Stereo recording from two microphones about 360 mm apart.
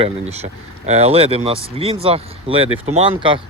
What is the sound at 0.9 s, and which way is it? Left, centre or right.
Speech, centre.